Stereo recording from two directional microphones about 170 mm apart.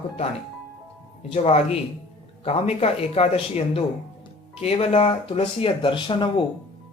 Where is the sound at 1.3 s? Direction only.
35° left (ahead or behind).